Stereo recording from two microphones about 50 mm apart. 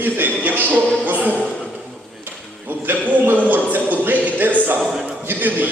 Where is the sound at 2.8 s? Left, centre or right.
Right.